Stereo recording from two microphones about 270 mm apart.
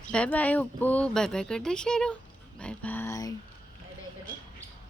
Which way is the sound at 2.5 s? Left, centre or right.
Centre.